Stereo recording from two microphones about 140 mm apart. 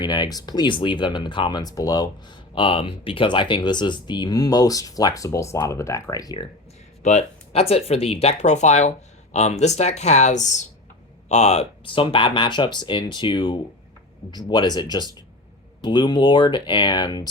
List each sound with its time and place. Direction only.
0.0 s speech: 30° left (ahead or behind)
2.6 s speech: 40° left (ahead or behind)
7.0 s speech: 55° left (ahead or behind); by 17.2 s 30° left (ahead or behind)